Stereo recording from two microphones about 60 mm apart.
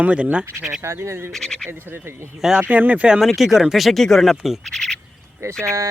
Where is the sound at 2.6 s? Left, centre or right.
Right.